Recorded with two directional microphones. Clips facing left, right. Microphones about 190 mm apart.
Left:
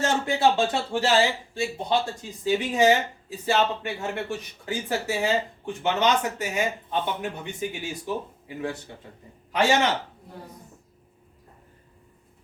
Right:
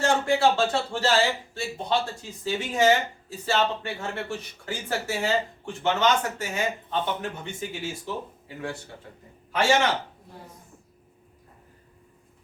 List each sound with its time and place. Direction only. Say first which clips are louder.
0.0 s speech: right 1 dB; 20° left (ahead or behind)